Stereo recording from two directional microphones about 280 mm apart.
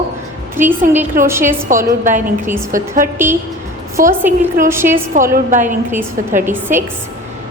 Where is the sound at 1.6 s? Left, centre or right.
Right.